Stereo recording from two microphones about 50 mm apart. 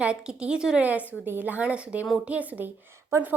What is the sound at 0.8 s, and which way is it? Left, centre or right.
A woman's voice, right.